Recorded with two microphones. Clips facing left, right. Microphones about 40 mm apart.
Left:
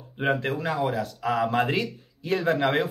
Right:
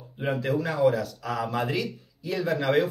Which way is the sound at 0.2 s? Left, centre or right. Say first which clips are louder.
Left 1 dB; left.